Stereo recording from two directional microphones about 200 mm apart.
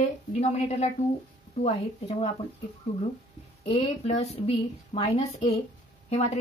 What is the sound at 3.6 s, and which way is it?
Speech, 30° left (ahead or behind).